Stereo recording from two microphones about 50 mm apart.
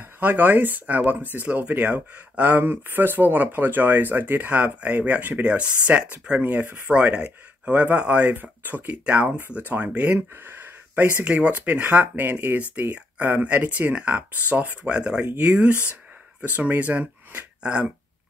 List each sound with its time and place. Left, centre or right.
0.0 s speech: right
2.6 s speech: right
6.4 s speech: right
6.9 s speech: right
8.4 s speech: right
9.0 s speech: right
10.3 s speech: right
12.9 s speech: right